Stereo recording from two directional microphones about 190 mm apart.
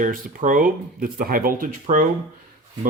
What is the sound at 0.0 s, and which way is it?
Speech, 45° right (ahead or behind).